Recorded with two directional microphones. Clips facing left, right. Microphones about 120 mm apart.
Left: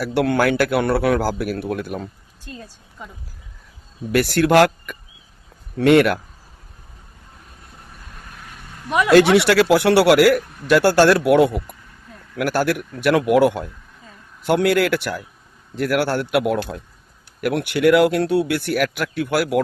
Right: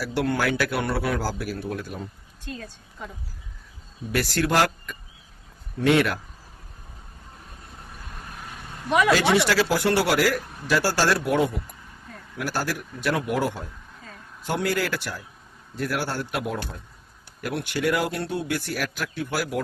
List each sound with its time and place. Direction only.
0.0 s a man's voice: 60° left (ahead or behind)
4.1 s a man's voice: 60° left (ahead or behind)
9.1 s speech: 65° left (ahead or behind); by 16.7 s 85° left
17.4 s speech: 75° left (ahead or behind)